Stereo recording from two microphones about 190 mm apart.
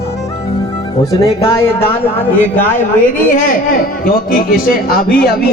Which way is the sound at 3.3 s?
45° left (ahead or behind).